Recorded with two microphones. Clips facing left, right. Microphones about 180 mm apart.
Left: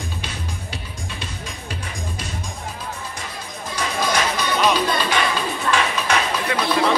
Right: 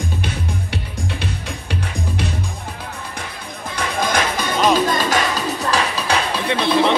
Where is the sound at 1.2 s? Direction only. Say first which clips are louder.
Right 5 dB; 65° right (ahead or behind).